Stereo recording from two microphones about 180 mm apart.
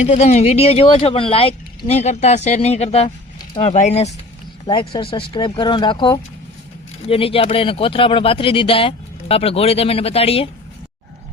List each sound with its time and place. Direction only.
0.0 s speech: 40° left (ahead or behind)
4.6 s speech: 25° left (ahead or behind)